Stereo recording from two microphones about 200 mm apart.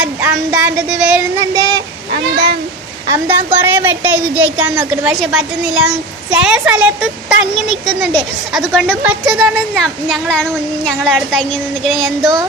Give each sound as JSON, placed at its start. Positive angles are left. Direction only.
{"t": 0.0, "sound": "speech", "side_deg": -5}
{"t": 1.4, "sound": "child singing", "side_deg": -20}
{"t": 3.1, "sound": "a woman's voice", "side_deg": -10}